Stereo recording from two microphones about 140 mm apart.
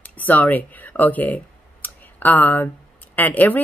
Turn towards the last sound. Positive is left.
turn(degrees=10)  # may be behind; listen again after turning